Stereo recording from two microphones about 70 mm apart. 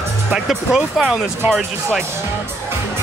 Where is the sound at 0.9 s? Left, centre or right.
Centre.